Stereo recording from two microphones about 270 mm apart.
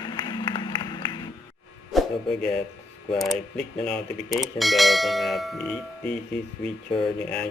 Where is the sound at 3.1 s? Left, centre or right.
Centre.